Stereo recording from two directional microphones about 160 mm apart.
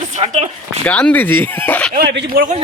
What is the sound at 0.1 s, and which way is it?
Speech, 45° right (ahead or behind).